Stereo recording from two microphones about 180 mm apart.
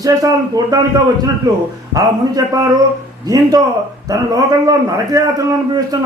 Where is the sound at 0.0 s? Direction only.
20° right (ahead or behind).